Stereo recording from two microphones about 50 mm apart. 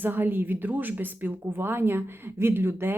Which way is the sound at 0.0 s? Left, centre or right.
Right.